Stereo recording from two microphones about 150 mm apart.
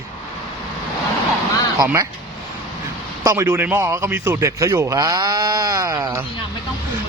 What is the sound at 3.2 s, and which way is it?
A man's voice, 20° right (ahead or behind).